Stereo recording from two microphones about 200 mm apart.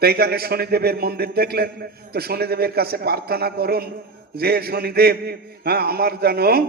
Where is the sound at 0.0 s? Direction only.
50° right (ahead or behind).